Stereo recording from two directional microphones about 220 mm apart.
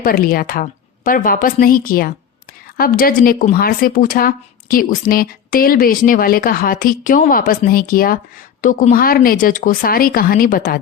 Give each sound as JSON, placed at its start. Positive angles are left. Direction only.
{"t": 0.0, "sound": "a woman's voice", "side_deg": 40}